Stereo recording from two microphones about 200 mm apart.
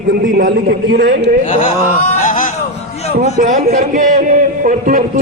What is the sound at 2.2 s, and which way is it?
Music, 40° left (ahead or behind).